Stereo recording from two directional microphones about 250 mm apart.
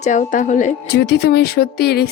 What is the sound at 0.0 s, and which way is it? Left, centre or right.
A woman's voice, left.